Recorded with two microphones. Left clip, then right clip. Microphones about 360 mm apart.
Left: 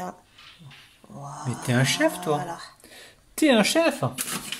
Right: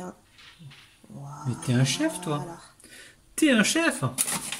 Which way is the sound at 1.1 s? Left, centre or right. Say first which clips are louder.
Left 4 dB; left.